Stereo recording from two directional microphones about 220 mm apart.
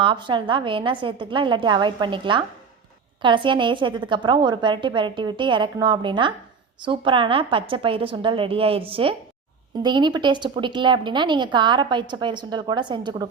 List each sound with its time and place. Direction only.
0.0 s a woman's voice: 20° right (ahead or behind)